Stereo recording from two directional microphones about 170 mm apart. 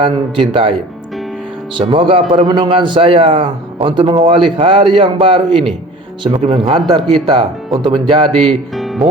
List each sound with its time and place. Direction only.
0.0 s a man's voice: 30° right (ahead or behind)
8.7 s music: centre (ahead or behind)